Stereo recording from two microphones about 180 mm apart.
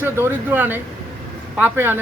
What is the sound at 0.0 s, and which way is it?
Speech, 10° right (ahead or behind).